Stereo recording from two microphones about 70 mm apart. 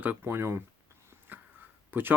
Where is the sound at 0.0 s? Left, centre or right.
Right.